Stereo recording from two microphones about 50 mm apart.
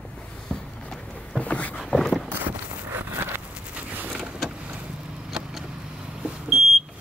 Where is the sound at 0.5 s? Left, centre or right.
Centre.